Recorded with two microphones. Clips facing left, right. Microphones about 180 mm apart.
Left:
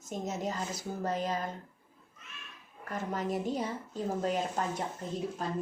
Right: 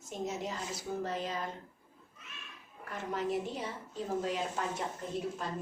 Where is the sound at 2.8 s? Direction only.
45° left (ahead or behind).